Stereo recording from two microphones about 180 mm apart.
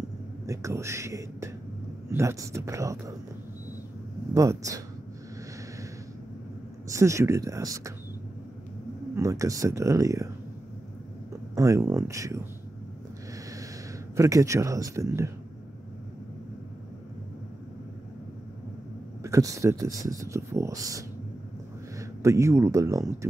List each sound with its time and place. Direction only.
0.5 s speech: 15° right (ahead or behind)
4.3 s speech: 15° right (ahead or behind)
6.9 s speech: 15° right (ahead or behind)
9.1 s speech: 20° right (ahead or behind)
11.5 s speech: 20° right (ahead or behind)
14.1 s speech: 20° right (ahead or behind)
19.2 s speech: 20° right (ahead or behind)
22.2 s speech: 15° right (ahead or behind)